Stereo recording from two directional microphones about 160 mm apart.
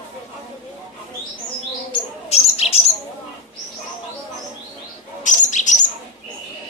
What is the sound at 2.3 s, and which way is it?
Bird, 40° left (ahead or behind).